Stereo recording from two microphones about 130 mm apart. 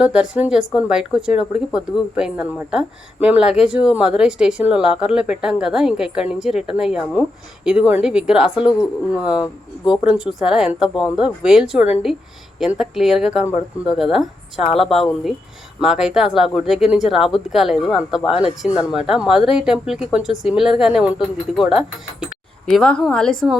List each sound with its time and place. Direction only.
0.0 s speech: 10° right (ahead or behind)
9.4 s speech: 35° left (ahead or behind)
10.0 s speech: 5° right (ahead or behind)